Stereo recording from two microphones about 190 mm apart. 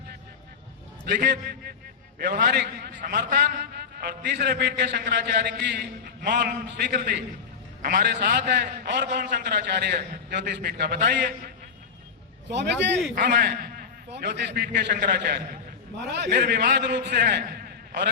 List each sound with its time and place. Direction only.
1.2 s a man's voice: 60° right (ahead or behind)
7.8 s a man's voice: 45° right (ahead or behind)
8.4 s a man's voice: 65° right (ahead or behind)
12.5 s a man's voice: 65° right (ahead or behind)